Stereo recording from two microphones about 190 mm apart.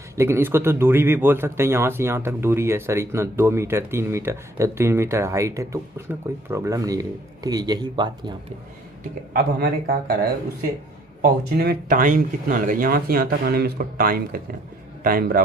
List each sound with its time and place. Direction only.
0.2 s speech: 15° right (ahead or behind)
9.3 s speech: 55° right (ahead or behind)
11.2 s speech: 55° right (ahead or behind)